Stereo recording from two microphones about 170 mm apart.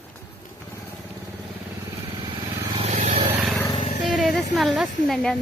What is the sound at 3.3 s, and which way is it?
Vehicle, centre (ahead or behind).